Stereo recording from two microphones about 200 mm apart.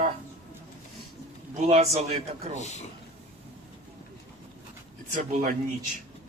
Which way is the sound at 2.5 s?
35° left (ahead or behind).